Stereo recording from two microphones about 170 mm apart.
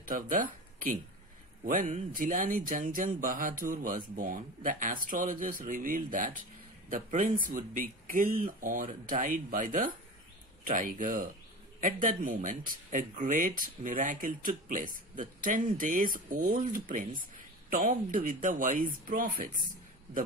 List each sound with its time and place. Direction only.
0.0 s a man's voice: 50° right (ahead or behind)